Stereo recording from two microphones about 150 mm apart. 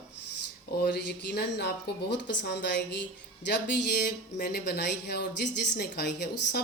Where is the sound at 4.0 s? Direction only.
90° left.